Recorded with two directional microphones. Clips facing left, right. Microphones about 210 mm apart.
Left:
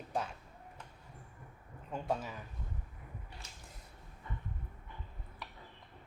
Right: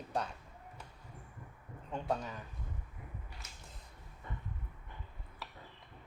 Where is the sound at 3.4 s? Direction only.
30° left (ahead or behind).